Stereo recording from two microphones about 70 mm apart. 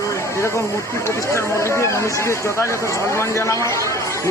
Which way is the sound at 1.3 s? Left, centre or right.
Left.